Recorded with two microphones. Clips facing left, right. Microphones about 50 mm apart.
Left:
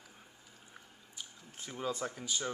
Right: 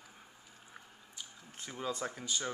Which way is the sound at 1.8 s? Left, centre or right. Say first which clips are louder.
Left 1 dB; centre.